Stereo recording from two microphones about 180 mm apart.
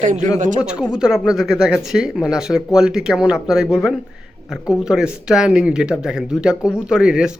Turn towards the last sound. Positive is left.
turn(degrees=-5)  # may be behind; listen again after turning